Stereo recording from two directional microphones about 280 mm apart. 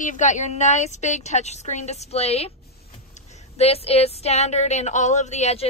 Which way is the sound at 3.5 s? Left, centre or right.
Left.